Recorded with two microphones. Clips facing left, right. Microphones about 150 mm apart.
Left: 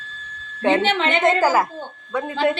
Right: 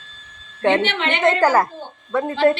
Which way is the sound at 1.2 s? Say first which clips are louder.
Right 3 dB; 5° left (ahead or behind).